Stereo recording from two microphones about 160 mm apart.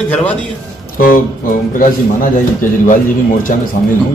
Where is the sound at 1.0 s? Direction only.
60° left (ahead or behind).